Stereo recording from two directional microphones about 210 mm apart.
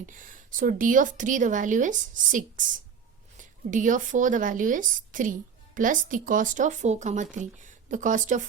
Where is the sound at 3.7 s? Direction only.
40° right (ahead or behind).